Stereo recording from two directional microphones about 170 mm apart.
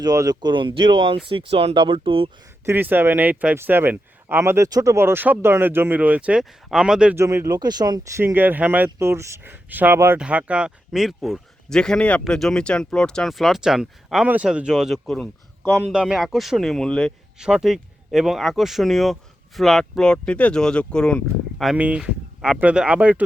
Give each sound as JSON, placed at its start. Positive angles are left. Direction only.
{"t": 0.0, "sound": "speech", "side_deg": -20}
{"t": 2.6, "sound": "speech", "side_deg": -10}
{"t": 7.3, "sound": "speech", "side_deg": -20}